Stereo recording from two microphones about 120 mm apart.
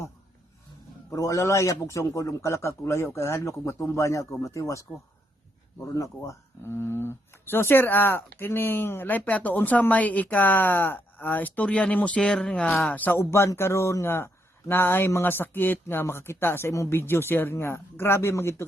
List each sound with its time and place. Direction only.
1.1 s speech: 25° left (ahead or behind)
5.9 s speech: 25° left (ahead or behind)